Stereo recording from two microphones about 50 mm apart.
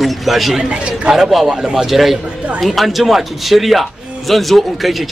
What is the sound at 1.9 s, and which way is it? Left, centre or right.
A man's voice, centre.